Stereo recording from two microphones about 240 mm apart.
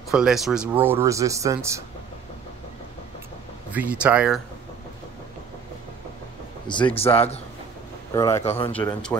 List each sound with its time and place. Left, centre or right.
0.1 s speech: centre
3.7 s speech: centre
6.7 s a man's voice: centre
8.1 s speech: centre
8.5 s a man's voice: left
8.7 s speech: centre